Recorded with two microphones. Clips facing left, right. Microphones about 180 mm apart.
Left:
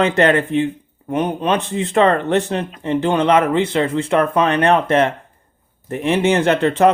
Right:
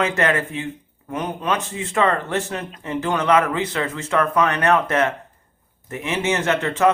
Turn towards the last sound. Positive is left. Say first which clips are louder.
# left 5 dB
turn(degrees=35)  # may be behind; listen again after turning